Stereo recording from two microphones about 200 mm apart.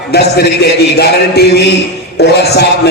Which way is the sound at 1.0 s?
55° left (ahead or behind).